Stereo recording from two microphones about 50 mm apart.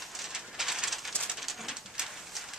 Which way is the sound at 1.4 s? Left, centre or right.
Centre.